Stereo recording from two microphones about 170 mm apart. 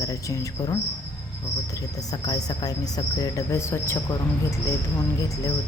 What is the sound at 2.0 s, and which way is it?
Speech, 25° left (ahead or behind).